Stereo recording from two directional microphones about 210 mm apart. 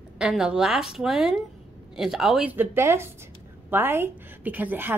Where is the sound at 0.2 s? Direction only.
5° right (ahead or behind).